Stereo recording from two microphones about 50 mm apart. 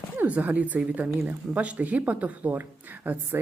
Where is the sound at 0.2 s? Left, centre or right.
Right.